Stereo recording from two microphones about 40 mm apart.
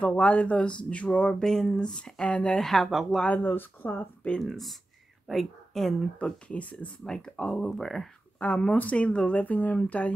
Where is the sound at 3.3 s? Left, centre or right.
Left.